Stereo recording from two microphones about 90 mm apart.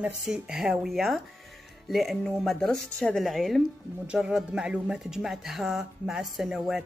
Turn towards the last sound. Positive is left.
turn(degrees=-5)  # may be behind; listen again after turning